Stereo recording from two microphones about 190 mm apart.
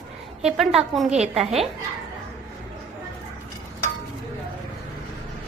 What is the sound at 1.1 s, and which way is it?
Speech, 35° right (ahead or behind).